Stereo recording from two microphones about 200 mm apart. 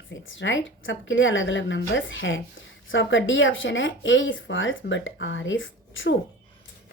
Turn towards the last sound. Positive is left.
turn(degrees=70)  # may be behind; listen again after turning